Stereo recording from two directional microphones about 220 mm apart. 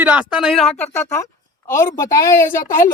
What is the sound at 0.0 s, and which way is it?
Speech, 5° right (ahead or behind).